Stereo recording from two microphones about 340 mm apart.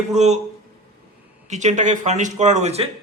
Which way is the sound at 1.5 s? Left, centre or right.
Right.